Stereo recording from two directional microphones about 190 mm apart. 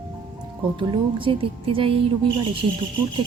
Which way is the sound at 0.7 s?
25° right (ahead or behind).